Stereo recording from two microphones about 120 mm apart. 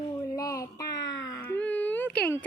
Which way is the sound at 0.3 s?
30° left (ahead or behind).